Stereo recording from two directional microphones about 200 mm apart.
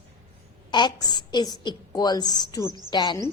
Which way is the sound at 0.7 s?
20° left (ahead or behind).